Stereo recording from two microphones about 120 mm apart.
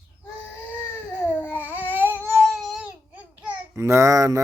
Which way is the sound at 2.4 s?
Centre (ahead or behind).